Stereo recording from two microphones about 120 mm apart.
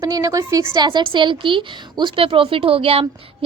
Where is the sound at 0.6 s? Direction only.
40° right (ahead or behind).